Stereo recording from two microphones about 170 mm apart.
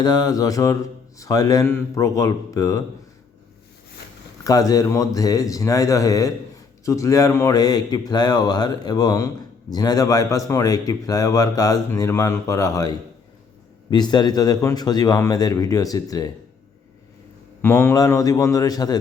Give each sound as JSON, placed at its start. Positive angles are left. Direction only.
{"t": 0.0, "sound": "speech", "side_deg": 25}
{"t": 4.4, "sound": "speech", "side_deg": 20}
{"t": 17.6, "sound": "speech", "side_deg": 15}